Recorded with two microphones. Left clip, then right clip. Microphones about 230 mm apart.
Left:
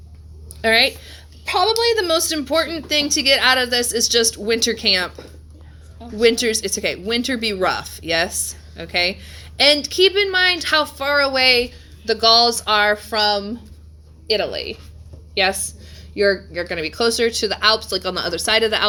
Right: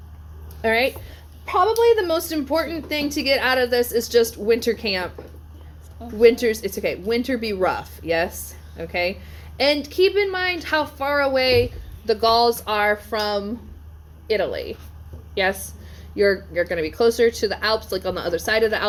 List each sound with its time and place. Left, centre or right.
0.6 s a sound: left
1.5 s a woman's voice: left
14.5 s a woman's voice: left